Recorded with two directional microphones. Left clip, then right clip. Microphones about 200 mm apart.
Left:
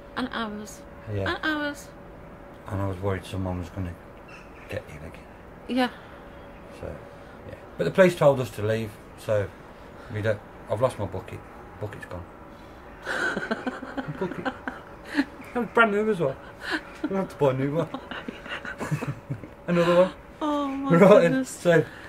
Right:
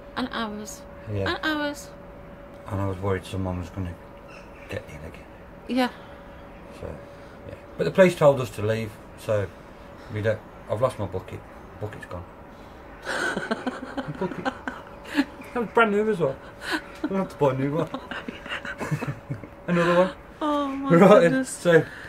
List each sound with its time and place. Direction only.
0.1 s speech: centre (ahead or behind)
5.7 s speech: centre (ahead or behind)
7.7 s speech: centre (ahead or behind)
13.0 s a sound: centre (ahead or behind)
19.6 s a woman's voice: centre (ahead or behind)